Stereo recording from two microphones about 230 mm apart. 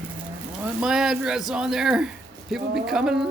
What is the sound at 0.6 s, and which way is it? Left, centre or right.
Speech, centre.